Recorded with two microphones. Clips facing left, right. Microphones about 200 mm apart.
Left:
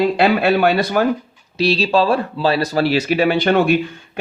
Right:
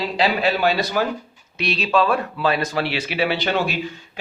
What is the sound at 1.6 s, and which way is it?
Speech, 30° left (ahead or behind).